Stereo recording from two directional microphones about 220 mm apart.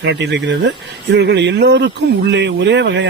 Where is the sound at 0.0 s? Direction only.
55° right (ahead or behind).